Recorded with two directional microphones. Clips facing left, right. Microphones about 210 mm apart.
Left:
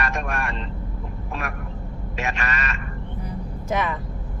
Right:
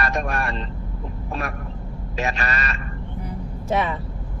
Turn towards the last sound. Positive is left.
turn(degrees=-30)  # may be behind; listen again after turning